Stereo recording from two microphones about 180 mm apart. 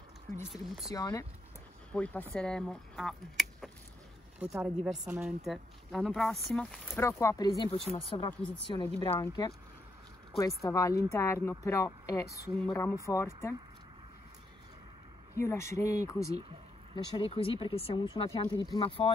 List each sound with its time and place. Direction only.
0.8 s speech: 20° left (ahead or behind)
1.9 s a woman's voice: 10° left (ahead or behind)
7.0 s speech: 15° left (ahead or behind); by 8.3 s 30° left (ahead or behind)
8.3 s a woman's voice: 5° left (ahead or behind)
10.6 s a woman's voice: 20° left (ahead or behind)
15.3 s a woman's voice: 15° left (ahead or behind)
16.9 s speech: 30° left (ahead or behind)